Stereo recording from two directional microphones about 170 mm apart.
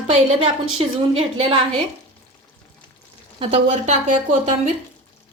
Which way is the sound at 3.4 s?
35° right (ahead or behind).